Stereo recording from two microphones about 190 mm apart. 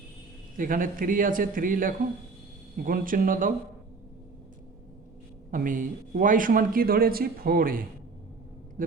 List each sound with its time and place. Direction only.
0.5 s a man's voice: 45° right (ahead or behind)
5.5 s a man's voice: 45° right (ahead or behind)